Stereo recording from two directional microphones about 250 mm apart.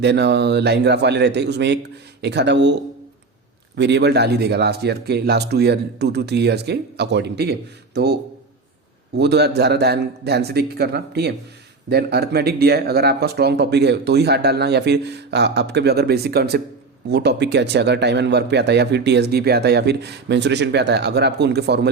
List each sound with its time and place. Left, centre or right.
0.0 s a man's voice: right
3.8 s speech: right